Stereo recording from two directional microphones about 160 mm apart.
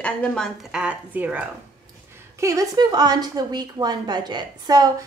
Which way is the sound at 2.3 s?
20° right (ahead or behind).